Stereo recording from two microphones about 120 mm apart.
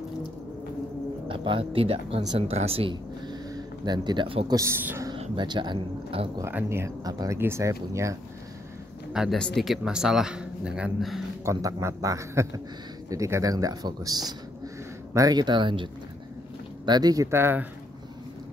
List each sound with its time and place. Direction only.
1.3 s speech: 45° right (ahead or behind)
3.3 s a sound: 35° right (ahead or behind)
4.5 s a man's voice: 25° right (ahead or behind)
5.1 s speech: 45° right (ahead or behind)
6.4 s a man's voice: 20° right (ahead or behind)
7.1 s speech: 30° right (ahead or behind)
7.3 s a man's voice: 20° right (ahead or behind)
9.1 s speech: 5° right (ahead or behind)
11.4 s a man's voice: 25° right (ahead or behind)